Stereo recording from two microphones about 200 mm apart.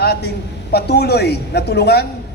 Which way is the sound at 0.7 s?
55° left (ahead or behind).